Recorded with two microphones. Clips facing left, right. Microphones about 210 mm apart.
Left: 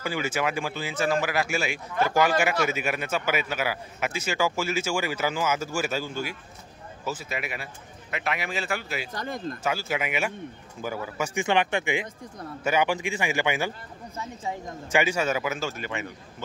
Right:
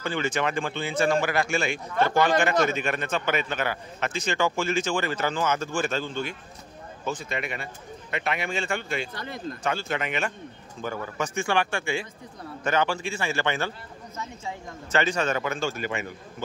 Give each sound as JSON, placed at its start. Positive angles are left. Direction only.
{"t": 0.0, "sound": "a man's voice", "side_deg": 5}
{"t": 9.1, "sound": "speech", "side_deg": 45}
{"t": 9.6, "sound": "speech", "side_deg": 5}
{"t": 15.8, "sound": "a man's voice", "side_deg": -45}